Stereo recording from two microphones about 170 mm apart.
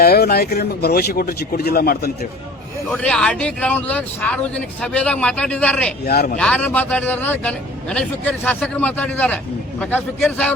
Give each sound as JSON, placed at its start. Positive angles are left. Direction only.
{"t": 0.0, "sound": "speech", "side_deg": 65}
{"t": 2.9, "sound": "a man's voice", "side_deg": 5}
{"t": 6.1, "sound": "speech", "side_deg": 65}
{"t": 6.3, "sound": "a man's voice", "side_deg": 5}